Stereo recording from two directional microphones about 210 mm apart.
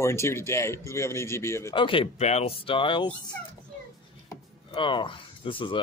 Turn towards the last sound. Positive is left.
turn(degrees=25)  # may be behind; listen again after turning